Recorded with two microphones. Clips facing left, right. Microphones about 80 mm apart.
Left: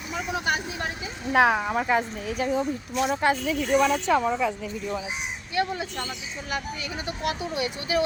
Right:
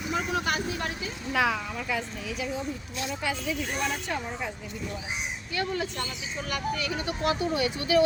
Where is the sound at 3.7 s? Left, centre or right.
Left.